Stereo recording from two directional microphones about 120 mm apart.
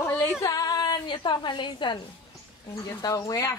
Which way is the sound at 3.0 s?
30° left (ahead or behind).